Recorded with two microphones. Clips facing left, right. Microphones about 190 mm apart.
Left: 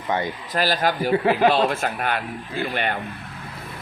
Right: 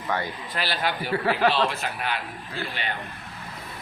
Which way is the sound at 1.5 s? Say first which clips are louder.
Left 4 dB; 50° left (ahead or behind).